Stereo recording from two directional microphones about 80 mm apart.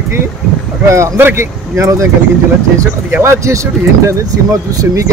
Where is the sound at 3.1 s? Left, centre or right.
Right.